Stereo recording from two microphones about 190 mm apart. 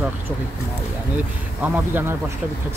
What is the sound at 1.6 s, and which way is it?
Speech, 10° right (ahead or behind).